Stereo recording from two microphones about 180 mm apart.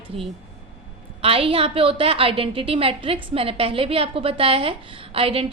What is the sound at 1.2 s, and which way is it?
A woman's voice, 30° right (ahead or behind).